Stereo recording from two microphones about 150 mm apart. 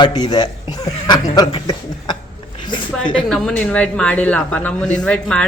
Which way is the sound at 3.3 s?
5° left (ahead or behind).